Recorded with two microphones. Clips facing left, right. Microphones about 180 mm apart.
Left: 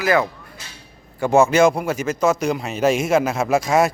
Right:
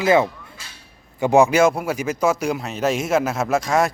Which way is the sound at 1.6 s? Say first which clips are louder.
Left 1 dB; 5° right (ahead or behind).